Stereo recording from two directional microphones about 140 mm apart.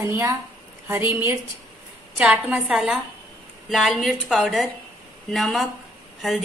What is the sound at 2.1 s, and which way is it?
A woman's voice, 5° right (ahead or behind).